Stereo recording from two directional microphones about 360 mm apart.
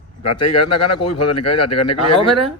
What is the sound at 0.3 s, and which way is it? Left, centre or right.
A man's voice, left.